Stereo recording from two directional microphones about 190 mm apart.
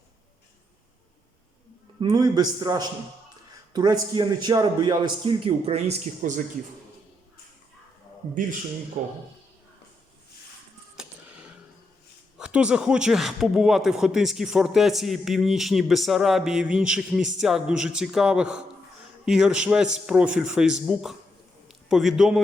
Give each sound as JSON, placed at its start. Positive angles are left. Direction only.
{"t": 2.0, "sound": "a man's voice", "side_deg": -20}
{"t": 10.9, "sound": "a sound", "side_deg": -5}
{"t": 12.4, "sound": "a man's voice", "side_deg": -5}